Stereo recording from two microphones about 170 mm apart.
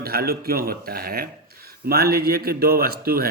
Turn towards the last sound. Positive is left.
turn(degrees=-65)  # may be behind; listen again after turning